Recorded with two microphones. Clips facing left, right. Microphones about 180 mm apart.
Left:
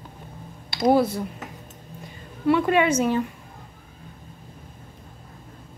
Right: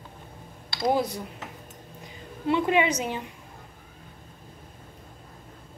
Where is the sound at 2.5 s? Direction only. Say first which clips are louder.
Left 4 dB; 15° right (ahead or behind).